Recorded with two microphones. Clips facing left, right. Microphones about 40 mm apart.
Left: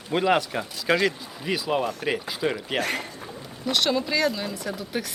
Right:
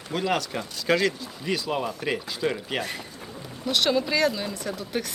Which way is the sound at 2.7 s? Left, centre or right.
Left.